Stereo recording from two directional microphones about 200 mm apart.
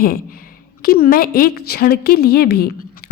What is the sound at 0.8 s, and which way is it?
A woman's voice, 45° left (ahead or behind).